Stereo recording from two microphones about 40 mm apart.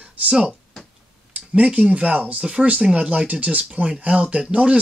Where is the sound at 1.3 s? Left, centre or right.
Right.